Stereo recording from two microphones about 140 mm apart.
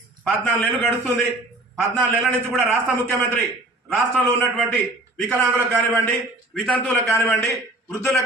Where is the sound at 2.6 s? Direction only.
15° left (ahead or behind).